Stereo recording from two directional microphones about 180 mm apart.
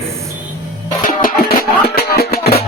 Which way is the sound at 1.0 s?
50° left (ahead or behind).